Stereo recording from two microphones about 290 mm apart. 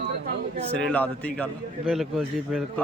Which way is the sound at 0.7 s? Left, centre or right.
Centre.